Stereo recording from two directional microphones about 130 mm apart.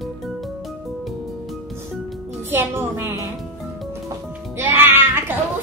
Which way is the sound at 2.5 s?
20° right (ahead or behind).